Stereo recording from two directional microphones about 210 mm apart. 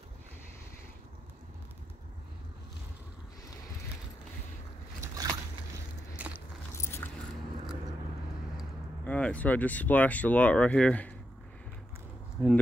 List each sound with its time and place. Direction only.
5.0 s vehicle: 15° right (ahead or behind)
6.7 s keys jangling: 15° left (ahead or behind)
8.5 s speech: 5° left (ahead or behind)
12.4 s speech: 10° right (ahead or behind)